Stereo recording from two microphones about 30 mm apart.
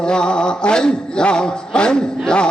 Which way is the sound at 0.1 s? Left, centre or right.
Left.